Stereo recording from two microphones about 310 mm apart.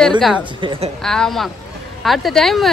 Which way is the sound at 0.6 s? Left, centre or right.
Centre.